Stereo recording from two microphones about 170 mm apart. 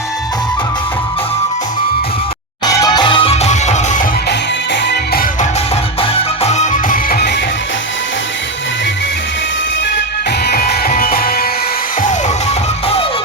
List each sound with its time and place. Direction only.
2.8 s music: 25° left (ahead or behind); by 4.0 s 45° left (ahead or behind)
4.3 s music: 80° left
6.0 s music: 40° left (ahead or behind); by 7.3 s 55° left (ahead or behind)
10.4 s music: 65° left (ahead or behind)